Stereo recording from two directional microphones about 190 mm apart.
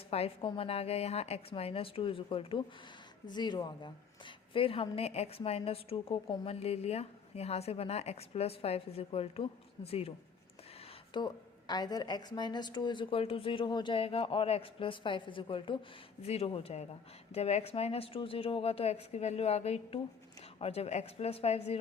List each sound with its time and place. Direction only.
0.1 s a woman's voice: 30° left (ahead or behind)
11.1 s a woman's voice: 25° left (ahead or behind)